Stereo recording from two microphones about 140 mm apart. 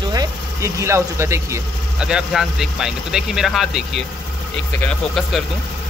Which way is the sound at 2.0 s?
5° right (ahead or behind).